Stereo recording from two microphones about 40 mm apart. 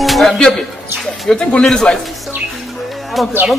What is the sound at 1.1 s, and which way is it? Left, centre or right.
Speech, centre.